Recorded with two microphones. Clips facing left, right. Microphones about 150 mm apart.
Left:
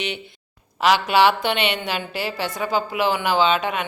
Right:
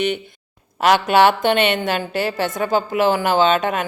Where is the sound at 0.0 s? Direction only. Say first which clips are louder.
Right 8 dB; 50° right (ahead or behind).